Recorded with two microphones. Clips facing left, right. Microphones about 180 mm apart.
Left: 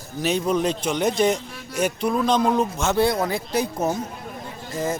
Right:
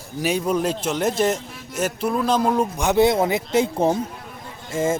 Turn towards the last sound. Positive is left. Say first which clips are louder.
# right 4 dB
turn(degrees=-25)  # may be behind; listen again after turning